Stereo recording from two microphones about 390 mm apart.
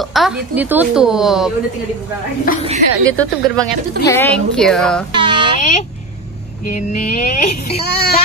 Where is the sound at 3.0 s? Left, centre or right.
Centre.